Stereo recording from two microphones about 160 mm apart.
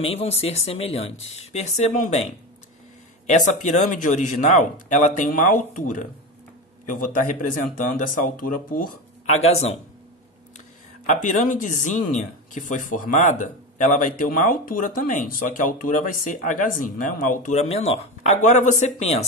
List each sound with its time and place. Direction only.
0.0 s speech: 40° left (ahead or behind)
3.3 s speech: 50° left (ahead or behind)
7.2 s speech: 55° left (ahead or behind)
11.1 s speech: 50° left (ahead or behind)